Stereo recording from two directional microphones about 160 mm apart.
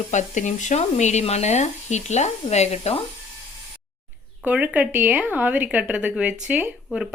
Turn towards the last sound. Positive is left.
turn(degrees=-5)  # may be behind; listen again after turning